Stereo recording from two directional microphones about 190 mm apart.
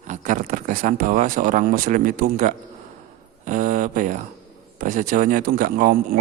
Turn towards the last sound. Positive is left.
turn(degrees=-50)  # may be behind; listen again after turning